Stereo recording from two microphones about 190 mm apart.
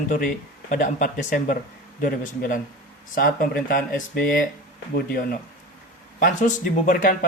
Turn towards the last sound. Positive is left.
turn(degrees=45)  # may be behind; listen again after turning